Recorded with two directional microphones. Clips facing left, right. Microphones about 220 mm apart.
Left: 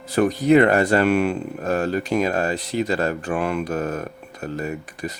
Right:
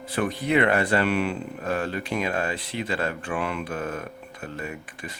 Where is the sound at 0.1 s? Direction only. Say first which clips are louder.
Left 8 dB; 40° left (ahead or behind).